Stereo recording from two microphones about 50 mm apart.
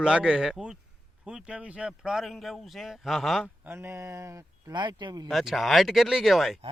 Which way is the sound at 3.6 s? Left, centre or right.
Right.